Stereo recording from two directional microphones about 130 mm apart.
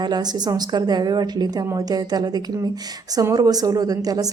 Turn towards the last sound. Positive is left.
turn(degrees=-30)  # may be behind; listen again after turning